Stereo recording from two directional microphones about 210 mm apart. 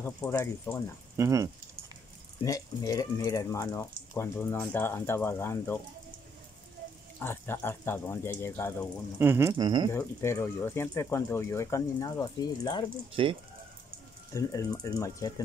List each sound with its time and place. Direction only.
0.0 s speech: 10° left (ahead or behind)
1.1 s speech: 15° right (ahead or behind)
2.4 s speech: 15° left (ahead or behind)
7.2 s speech: 10° left (ahead or behind)
9.2 s speech: 10° right (ahead or behind)
9.9 s speech: 10° left (ahead or behind)
13.1 s speech: 25° right (ahead or behind)
14.3 s speech: 15° left (ahead or behind)